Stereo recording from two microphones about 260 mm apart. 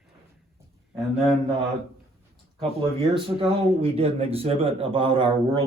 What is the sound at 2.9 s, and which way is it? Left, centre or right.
Speech, right.